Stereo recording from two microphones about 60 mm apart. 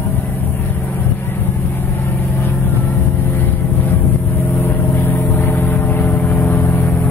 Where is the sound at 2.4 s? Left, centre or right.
Left.